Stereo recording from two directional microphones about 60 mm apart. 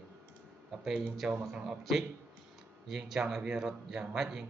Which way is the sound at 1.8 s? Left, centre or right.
Centre.